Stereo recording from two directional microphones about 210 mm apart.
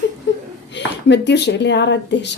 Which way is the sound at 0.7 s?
55° left (ahead or behind).